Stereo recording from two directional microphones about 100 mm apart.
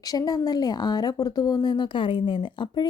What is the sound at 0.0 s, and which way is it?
A woman's voice, 40° left (ahead or behind).